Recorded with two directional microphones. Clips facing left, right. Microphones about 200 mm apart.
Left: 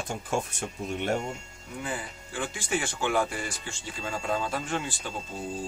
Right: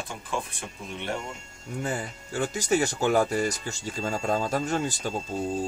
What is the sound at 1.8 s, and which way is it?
Speech, 45° right (ahead or behind).